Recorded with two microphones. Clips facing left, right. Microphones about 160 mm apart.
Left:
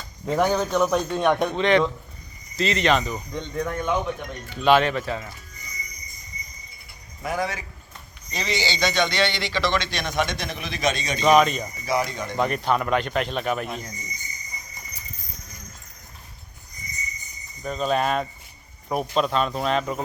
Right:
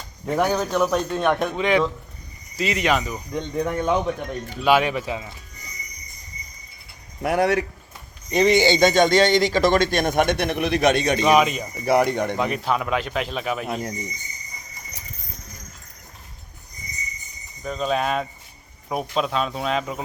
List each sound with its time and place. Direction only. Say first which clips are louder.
0.3 s a man's voice: even; 5° right (ahead or behind)
3.4 s speech: right 4 dB; 15° right (ahead or behind)
4.6 s speech: left 1 dB; 10° right (ahead or behind)
7.2 s speech: right 8 dB; 65° right (ahead or behind)
8.3 s a man's voice: right 11 dB; 55° right (ahead or behind)
11.2 s speech: left 5 dB; 5° right (ahead or behind)
11.9 s speech: right 7 dB; 60° right (ahead or behind)
12.4 s a man's voice: even; centre (ahead or behind)
14.9 s clip-clop: right 2 dB; 85° right
17.6 s a man's voice: even; centre (ahead or behind)